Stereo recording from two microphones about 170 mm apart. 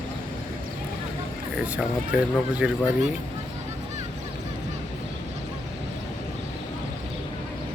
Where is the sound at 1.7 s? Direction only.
10° right (ahead or behind).